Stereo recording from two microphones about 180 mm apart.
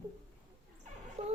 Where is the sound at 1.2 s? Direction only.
30° right (ahead or behind).